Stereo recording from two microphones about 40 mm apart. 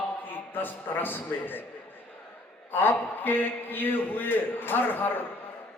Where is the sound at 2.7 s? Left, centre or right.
Left.